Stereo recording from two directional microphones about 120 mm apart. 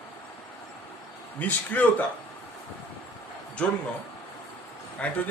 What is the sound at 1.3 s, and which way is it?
Speech, 15° left (ahead or behind).